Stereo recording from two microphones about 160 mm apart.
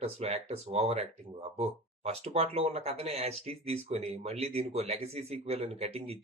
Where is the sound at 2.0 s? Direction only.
40° right (ahead or behind).